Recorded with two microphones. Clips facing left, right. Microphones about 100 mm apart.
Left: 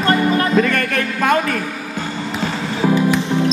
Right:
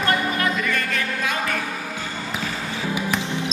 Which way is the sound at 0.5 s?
55° left (ahead or behind).